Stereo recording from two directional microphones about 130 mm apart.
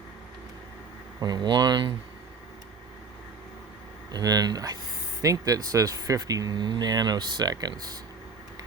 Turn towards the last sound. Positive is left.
turn(degrees=-30)  # may be behind; listen again after turning